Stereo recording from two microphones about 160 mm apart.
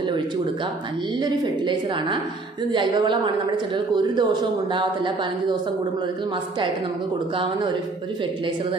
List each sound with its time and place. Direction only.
1.2 s speech: 30° right (ahead or behind)